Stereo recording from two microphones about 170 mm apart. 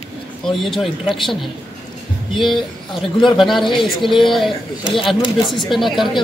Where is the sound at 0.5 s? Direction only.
Centre (ahead or behind).